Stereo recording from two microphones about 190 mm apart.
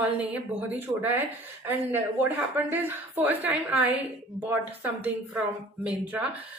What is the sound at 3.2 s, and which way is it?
Speech, 10° right (ahead or behind).